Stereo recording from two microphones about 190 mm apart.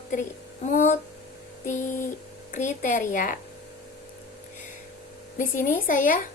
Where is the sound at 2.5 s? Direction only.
40° left (ahead or behind).